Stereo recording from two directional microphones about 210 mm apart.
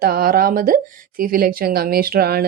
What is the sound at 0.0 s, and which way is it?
Speech, 45° right (ahead or behind).